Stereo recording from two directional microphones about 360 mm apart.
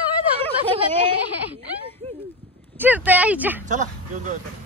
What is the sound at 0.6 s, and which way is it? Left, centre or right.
Speech, centre.